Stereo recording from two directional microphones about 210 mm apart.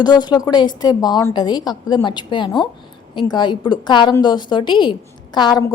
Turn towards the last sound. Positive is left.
turn(degrees=20)  # may be behind; listen again after turning